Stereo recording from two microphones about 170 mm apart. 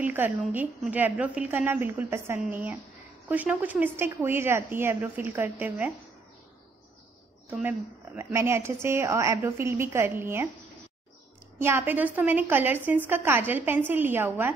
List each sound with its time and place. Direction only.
0.0 s a woman's voice: 10° right (ahead or behind)
7.4 s a woman's voice: 10° right (ahead or behind)
11.5 s a woman's voice: 15° right (ahead or behind)